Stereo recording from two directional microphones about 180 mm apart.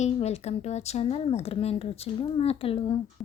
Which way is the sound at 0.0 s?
35° left (ahead or behind).